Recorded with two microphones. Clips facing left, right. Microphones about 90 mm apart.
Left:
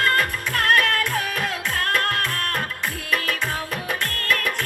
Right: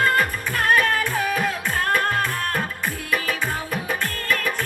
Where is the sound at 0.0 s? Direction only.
75° left (ahead or behind).